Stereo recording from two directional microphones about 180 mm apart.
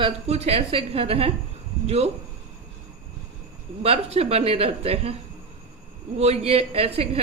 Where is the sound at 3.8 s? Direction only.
35° right (ahead or behind).